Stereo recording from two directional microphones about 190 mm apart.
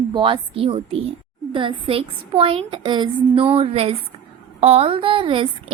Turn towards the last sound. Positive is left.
turn(degrees=-25)  # may be behind; listen again after turning